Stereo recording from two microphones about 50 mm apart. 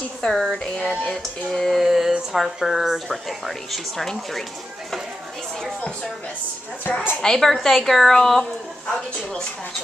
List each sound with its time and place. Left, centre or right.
0.2 s a woman's voice: centre
1.1 s a woman's voice: centre
1.8 s speech: centre
6.8 s a woman's voice: left
7.2 s a woman's voice: centre